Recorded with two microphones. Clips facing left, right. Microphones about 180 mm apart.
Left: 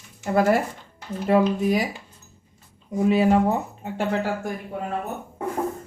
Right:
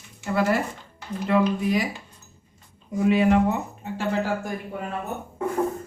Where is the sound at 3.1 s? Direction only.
35° left (ahead or behind).